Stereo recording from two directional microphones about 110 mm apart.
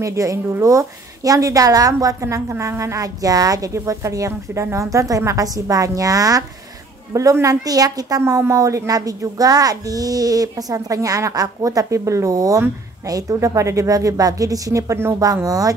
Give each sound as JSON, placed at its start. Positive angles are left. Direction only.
{"t": 0.0, "sound": "speech", "side_deg": -30}